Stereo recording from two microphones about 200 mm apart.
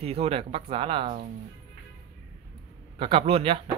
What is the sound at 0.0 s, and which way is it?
Speech, 30° right (ahead or behind).